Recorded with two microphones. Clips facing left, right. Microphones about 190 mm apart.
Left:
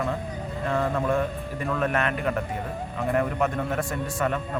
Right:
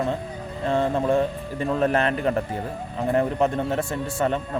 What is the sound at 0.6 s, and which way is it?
Speech, 30° right (ahead or behind).